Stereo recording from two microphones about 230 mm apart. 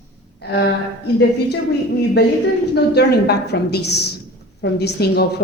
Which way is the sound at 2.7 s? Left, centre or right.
Left.